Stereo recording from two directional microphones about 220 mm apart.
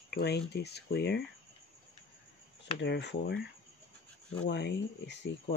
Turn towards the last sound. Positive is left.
turn(degrees=50)  # may be behind; listen again after turning